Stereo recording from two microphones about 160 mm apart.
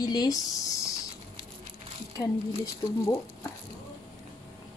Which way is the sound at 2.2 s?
20° left (ahead or behind).